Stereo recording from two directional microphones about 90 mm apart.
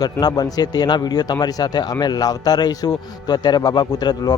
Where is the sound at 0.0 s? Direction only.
50° left (ahead or behind).